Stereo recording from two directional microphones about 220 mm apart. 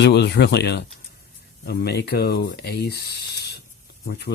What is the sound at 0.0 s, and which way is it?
Speech, 50° left (ahead or behind).